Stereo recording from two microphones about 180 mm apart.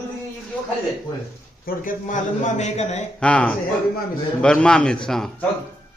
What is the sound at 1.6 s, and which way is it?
A man's voice, 45° left (ahead or behind).